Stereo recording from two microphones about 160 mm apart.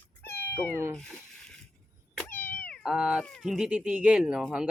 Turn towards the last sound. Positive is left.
turn(degrees=-5)  # may be behind; listen again after turning